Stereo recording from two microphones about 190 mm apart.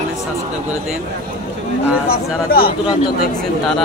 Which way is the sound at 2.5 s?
50° left (ahead or behind).